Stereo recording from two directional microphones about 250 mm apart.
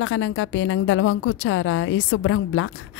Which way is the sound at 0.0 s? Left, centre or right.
Left.